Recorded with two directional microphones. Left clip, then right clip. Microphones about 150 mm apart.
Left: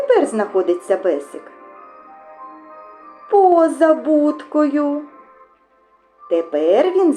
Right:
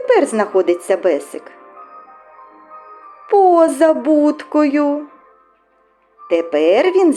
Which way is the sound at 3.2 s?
40° right (ahead or behind).